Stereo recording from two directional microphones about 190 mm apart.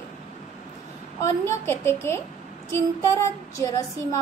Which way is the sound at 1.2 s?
15° left (ahead or behind).